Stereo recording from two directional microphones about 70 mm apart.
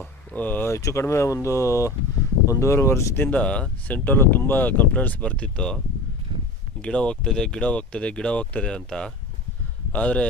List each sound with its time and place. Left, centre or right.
0.3 s speech: left
0.7 s speech: left
3.3 s speech: centre
6.8 s speech: centre